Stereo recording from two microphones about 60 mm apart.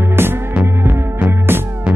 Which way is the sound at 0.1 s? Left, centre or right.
Right.